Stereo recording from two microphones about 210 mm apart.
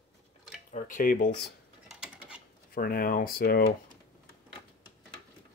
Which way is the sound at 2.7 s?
45° left (ahead or behind).